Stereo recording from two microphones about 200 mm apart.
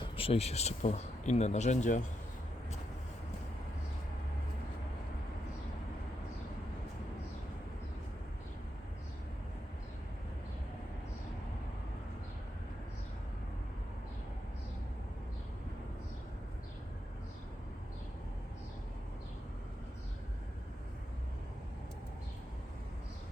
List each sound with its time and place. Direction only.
0.0 s speech: 30° left (ahead or behind)